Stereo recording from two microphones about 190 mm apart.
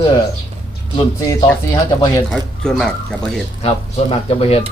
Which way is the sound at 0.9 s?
20° left (ahead or behind).